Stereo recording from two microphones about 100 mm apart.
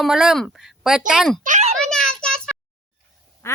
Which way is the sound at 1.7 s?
5° left (ahead or behind).